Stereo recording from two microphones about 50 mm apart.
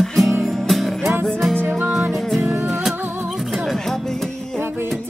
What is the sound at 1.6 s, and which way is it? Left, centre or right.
Music, right.